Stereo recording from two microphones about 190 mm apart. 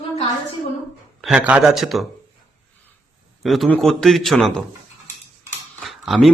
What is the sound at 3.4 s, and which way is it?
Speech, centre (ahead or behind).